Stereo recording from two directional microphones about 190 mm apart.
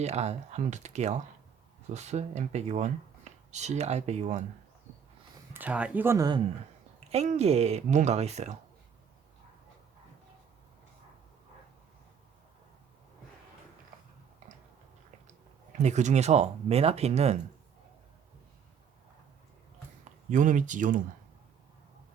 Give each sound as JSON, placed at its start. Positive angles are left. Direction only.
{"t": 0.0, "sound": "speech", "side_deg": -35}
{"t": 5.5, "sound": "speech", "side_deg": -5}
{"t": 7.1, "sound": "speech", "side_deg": -35}
{"t": 15.8, "sound": "speech", "side_deg": -40}
{"t": 20.3, "sound": "speech", "side_deg": -40}